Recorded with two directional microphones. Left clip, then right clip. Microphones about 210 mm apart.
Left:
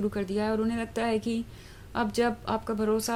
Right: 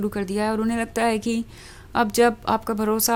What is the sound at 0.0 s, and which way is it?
Speech, 30° right (ahead or behind).